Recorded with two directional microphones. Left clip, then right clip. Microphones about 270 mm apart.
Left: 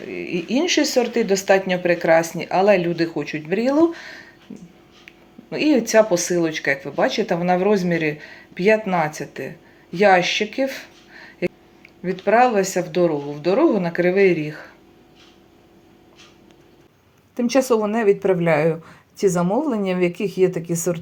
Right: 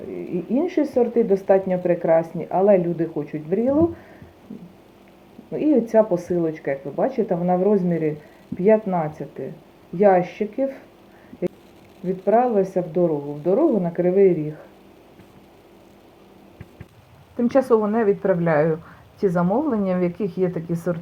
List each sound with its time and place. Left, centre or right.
0.0 s speech: left
5.5 s speech: left
12.0 s speech: left
17.7 s a woman's voice: left